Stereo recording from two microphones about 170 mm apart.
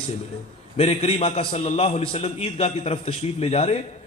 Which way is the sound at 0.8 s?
40° left (ahead or behind).